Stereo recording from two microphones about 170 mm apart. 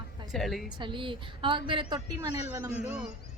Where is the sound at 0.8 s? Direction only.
30° right (ahead or behind).